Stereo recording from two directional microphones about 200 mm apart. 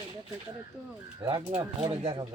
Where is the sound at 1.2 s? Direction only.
15° right (ahead or behind).